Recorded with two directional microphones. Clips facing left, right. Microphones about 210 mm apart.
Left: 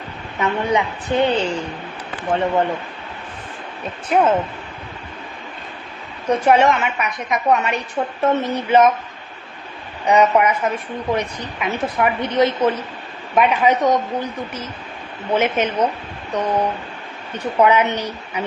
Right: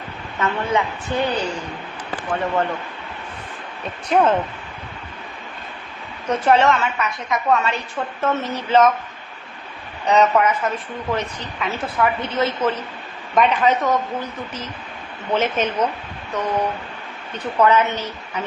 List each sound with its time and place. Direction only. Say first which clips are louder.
0.3 s a woman's voice: left 2 dB; 15° left (ahead or behind)
4.1 s a woman's voice: left 1 dB; 5° left (ahead or behind)
6.2 s a woman's voice: left 2 dB; 10° left (ahead or behind)
10.1 s a woman's voice: left 1 dB; 10° left (ahead or behind)